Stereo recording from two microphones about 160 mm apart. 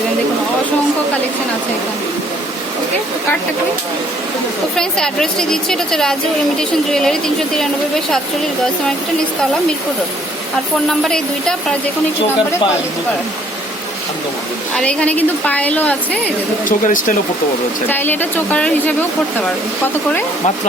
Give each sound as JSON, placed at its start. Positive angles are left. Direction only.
{"t": 4.8, "sound": "a woman's voice", "side_deg": 5}
{"t": 10.8, "sound": "a woman's voice", "side_deg": 5}
{"t": 14.8, "sound": "a woman's voice", "side_deg": 10}
{"t": 16.6, "sound": "speech", "side_deg": 55}
{"t": 17.8, "sound": "a woman's voice", "side_deg": 10}